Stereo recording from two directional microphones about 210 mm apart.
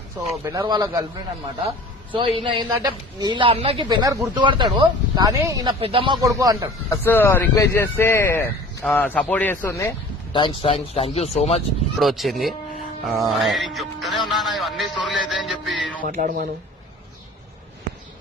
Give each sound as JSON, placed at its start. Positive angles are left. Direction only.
{"t": 0.4, "sound": "a man's voice", "side_deg": -15}
{"t": 2.1, "sound": "speech", "side_deg": -25}
{"t": 6.9, "sound": "a man's voice", "side_deg": 10}
{"t": 10.3, "sound": "speech", "side_deg": 25}
{"t": 11.9, "sound": "music", "side_deg": 0}
{"t": 16.0, "sound": "speech", "side_deg": -40}